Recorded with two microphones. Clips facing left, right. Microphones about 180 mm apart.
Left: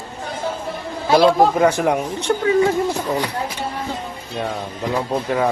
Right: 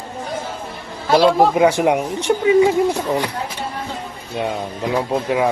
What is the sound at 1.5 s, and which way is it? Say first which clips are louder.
Speech: right 2 dB; 10° right (ahead or behind).